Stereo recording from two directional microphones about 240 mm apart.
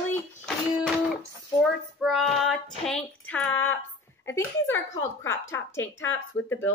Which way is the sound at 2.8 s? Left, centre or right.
Centre.